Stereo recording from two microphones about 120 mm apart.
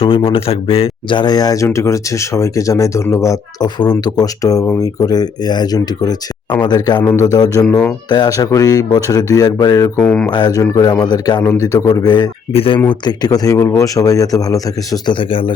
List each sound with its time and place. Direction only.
0.0 s speech: 50° left (ahead or behind); by 9.9 s 30° left (ahead or behind)
10.0 s mantra: 10° left (ahead or behind)
10.2 s speech: 35° left (ahead or behind)
12.5 s a man's voice: 50° left (ahead or behind)
12.9 s speech: 35° left (ahead or behind)
15.0 s a man's voice: 45° left (ahead or behind)